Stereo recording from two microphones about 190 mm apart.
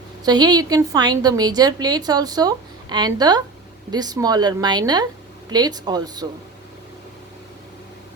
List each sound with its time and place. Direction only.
0.3 s a woman's voice: 20° right (ahead or behind)